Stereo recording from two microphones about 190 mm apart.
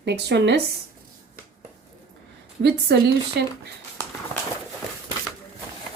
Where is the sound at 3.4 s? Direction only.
60° right (ahead or behind).